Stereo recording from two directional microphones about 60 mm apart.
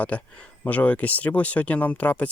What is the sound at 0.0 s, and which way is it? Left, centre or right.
Speech, left.